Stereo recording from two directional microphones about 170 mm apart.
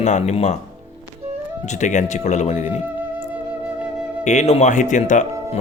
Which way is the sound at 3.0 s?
10° right (ahead or behind).